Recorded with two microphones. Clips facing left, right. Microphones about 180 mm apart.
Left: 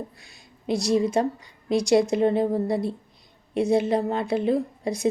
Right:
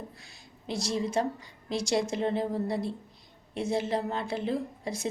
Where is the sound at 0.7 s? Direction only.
15° left (ahead or behind).